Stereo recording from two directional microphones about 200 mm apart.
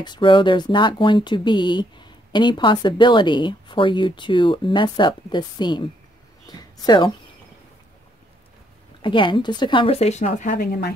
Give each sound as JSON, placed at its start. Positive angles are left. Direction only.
{"t": 0.0, "sound": "speech", "side_deg": 25}
{"t": 9.0, "sound": "speech", "side_deg": 25}